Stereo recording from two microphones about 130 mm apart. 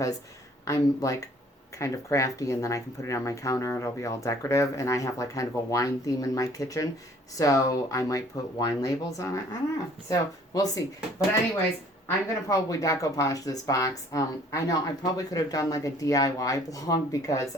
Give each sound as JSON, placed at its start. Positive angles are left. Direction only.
{"t": 0.6, "sound": "speech", "side_deg": 25}
{"t": 12.0, "sound": "speech", "side_deg": 25}